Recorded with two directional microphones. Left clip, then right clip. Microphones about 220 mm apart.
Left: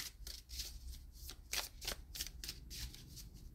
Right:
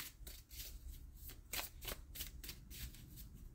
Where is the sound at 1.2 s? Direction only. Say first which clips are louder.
Left 4 dB; 20° left (ahead or behind).